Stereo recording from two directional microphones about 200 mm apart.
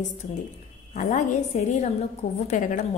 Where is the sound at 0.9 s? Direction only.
40° left (ahead or behind).